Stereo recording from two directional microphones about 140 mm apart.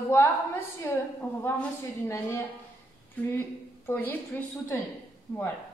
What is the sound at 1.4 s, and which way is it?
A woman's voice, 15° left (ahead or behind).